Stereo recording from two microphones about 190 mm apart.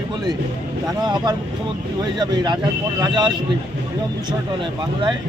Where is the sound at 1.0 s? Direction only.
20° right (ahead or behind).